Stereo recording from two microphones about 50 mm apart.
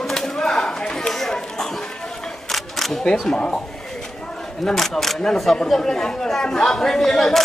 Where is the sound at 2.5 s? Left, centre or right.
Centre.